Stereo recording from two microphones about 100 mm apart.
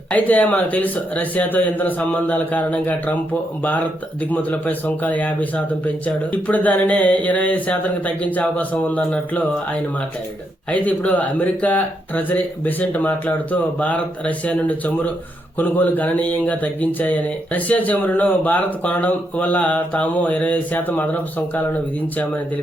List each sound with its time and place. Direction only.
0.1 s speech: 15° left (ahead or behind)
10.7 s speech: 15° left (ahead or behind)